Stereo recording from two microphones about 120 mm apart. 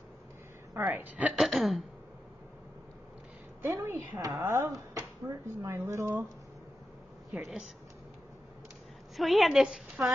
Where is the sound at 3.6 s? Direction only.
25° right (ahead or behind).